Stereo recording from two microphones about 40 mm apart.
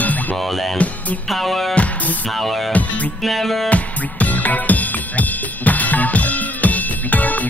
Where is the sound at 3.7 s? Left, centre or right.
Left.